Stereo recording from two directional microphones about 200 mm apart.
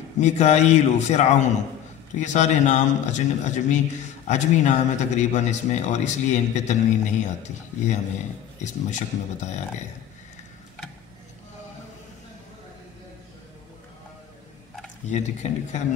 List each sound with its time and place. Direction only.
0.2 s speech: 35° left (ahead or behind)
15.0 s speech: 35° left (ahead or behind)